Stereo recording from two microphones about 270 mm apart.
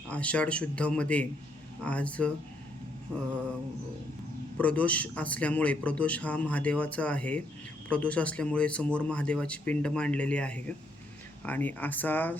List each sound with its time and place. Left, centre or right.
0.1 s a man's voice: centre
4.5 s a man's voice: centre